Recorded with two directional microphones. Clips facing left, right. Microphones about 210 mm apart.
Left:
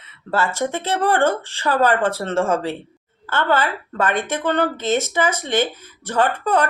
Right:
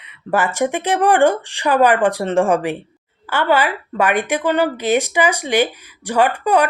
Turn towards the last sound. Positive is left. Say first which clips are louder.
# right 3 dB
turn(degrees=-10)  # may be behind; listen again after turning